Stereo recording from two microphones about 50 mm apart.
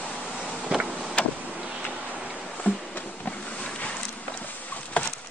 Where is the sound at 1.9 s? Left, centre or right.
Right.